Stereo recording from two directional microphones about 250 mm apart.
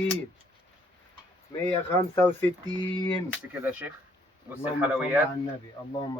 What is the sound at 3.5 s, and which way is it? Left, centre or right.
Speech, centre.